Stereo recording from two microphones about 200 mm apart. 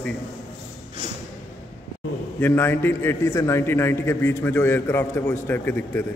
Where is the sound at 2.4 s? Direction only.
10° left (ahead or behind).